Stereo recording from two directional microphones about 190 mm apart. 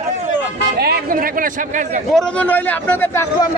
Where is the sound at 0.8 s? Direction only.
50° right (ahead or behind).